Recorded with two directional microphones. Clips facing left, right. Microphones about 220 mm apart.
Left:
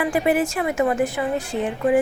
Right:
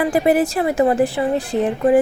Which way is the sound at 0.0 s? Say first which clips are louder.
Right 4 dB; 35° right (ahead or behind).